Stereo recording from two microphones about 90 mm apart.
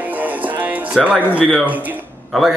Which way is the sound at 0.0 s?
20° right (ahead or behind).